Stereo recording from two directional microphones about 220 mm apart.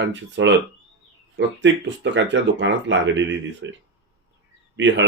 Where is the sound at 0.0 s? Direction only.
55° right (ahead or behind).